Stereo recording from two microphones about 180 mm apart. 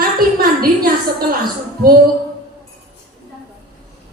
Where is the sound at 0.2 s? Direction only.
55° right (ahead or behind).